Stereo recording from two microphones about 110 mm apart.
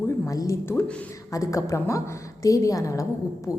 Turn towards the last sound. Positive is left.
turn(degrees=30)  # may be behind; listen again after turning